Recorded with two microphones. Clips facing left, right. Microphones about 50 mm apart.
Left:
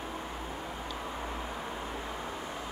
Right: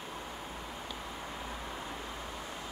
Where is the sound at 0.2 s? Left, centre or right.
Centre.